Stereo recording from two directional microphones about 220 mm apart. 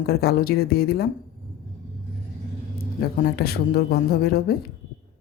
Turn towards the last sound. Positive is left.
turn(degrees=45)  # may be behind; listen again after turning